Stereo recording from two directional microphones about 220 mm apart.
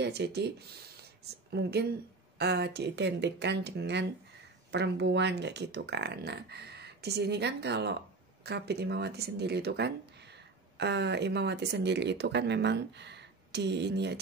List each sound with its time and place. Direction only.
0.0 s a woman's voice: 50° right (ahead or behind)